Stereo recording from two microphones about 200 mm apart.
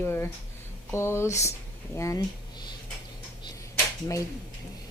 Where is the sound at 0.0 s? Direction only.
10° left (ahead or behind).